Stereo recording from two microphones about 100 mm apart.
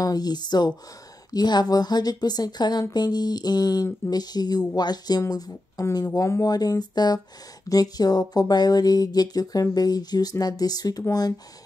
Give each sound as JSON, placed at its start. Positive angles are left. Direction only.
{"t": 0.0, "sound": "speech", "side_deg": 40}
{"t": 5.2, "sound": "speech", "side_deg": 30}